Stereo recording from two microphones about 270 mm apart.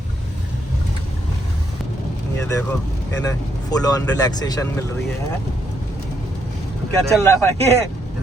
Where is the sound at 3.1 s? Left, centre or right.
Centre.